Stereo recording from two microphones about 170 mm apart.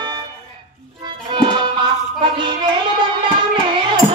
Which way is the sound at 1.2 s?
30° right (ahead or behind).